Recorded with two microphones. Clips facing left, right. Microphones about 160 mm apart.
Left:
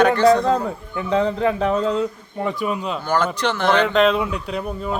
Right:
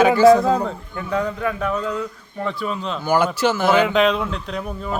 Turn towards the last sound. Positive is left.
turn(degrees=5)  # may be behind; listen again after turning